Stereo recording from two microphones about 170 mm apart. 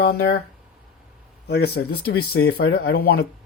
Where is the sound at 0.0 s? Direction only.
70° left (ahead or behind).